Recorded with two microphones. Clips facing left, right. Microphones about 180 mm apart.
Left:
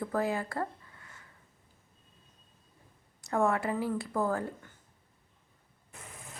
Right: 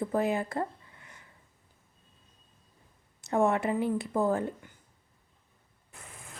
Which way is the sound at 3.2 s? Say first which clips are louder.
Right 2 dB; 20° right (ahead or behind).